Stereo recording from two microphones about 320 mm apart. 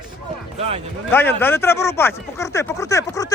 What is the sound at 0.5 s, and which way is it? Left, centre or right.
Speech, centre.